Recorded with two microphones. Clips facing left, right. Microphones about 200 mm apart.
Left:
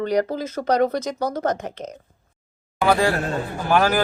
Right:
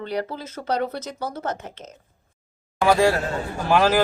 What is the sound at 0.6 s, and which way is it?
Speech, 75° left (ahead or behind).